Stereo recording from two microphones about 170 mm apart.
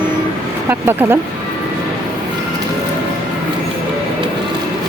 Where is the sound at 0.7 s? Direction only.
15° right (ahead or behind).